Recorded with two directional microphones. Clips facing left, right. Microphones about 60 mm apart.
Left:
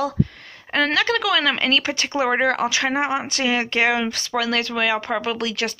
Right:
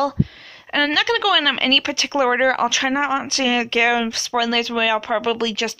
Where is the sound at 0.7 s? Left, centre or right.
Left.